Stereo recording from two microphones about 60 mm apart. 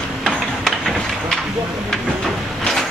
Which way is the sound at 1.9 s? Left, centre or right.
Centre.